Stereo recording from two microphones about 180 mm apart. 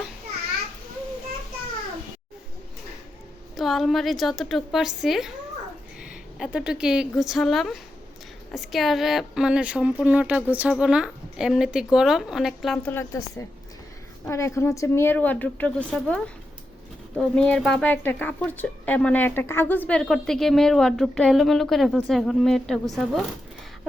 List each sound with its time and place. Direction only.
3.5 s a woman's voice: centre (ahead or behind)
12.9 s a woman's voice: 15° left (ahead or behind)
14.3 s a woman's voice: 15° left (ahead or behind); by 23.2 s centre (ahead or behind)